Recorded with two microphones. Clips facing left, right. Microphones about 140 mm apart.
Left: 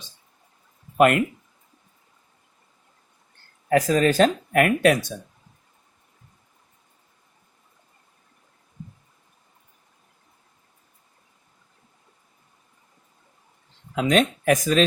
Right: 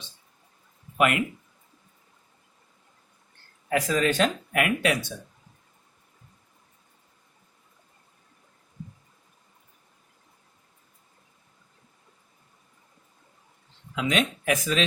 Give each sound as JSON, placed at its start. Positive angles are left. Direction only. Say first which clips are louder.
{"t": 0.9, "sound": "speech", "louder": "left 6 dB", "side_deg": 45}
{"t": 3.7, "sound": "speech", "louder": "left 5 dB", "side_deg": 40}
{"t": 13.9, "sound": "speech", "louder": "left 6 dB", "side_deg": 45}